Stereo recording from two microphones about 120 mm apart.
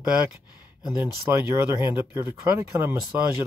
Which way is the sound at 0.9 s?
20° right (ahead or behind).